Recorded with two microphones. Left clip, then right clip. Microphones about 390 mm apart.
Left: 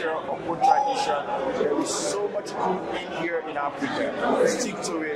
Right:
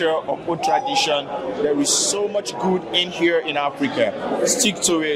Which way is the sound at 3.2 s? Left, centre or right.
Right.